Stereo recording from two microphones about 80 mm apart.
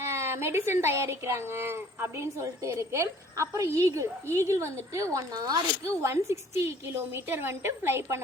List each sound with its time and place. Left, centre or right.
0.0 s speech: right